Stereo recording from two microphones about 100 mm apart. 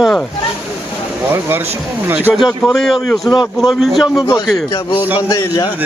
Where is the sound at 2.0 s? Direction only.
20° right (ahead or behind).